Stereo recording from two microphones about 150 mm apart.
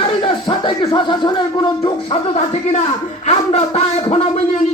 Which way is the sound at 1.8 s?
45° left (ahead or behind).